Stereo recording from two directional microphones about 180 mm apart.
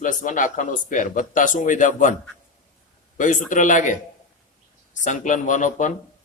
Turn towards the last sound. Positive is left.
turn(degrees=45)  # may be behind; listen again after turning